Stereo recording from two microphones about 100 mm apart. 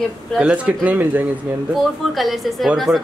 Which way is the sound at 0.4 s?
10° right (ahead or behind).